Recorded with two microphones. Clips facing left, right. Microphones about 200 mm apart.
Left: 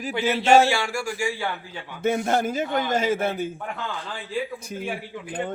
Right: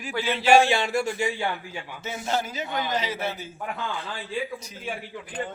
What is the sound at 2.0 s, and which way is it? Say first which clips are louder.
A man's voice: left 7 dB; 55° left (ahead or behind).